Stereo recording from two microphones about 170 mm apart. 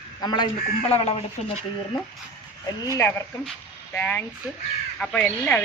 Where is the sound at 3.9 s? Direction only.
10° left (ahead or behind).